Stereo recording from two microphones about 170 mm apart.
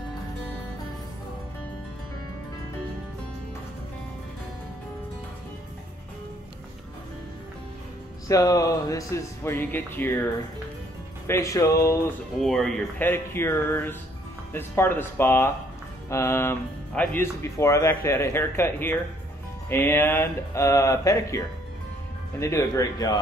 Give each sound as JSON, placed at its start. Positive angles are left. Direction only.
{"t": 8.3, "sound": "speech", "side_deg": 20}
{"t": 11.2, "sound": "speech", "side_deg": 15}
{"t": 12.4, "sound": "speech", "side_deg": 0}
{"t": 13.0, "sound": "speech", "side_deg": 15}
{"t": 22.4, "sound": "speech", "side_deg": 15}